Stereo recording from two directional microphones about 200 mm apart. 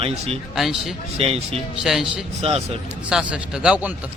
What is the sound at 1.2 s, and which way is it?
Speech, 30° right (ahead or behind).